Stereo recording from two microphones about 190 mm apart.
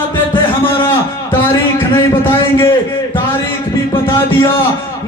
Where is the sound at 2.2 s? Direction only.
15° left (ahead or behind).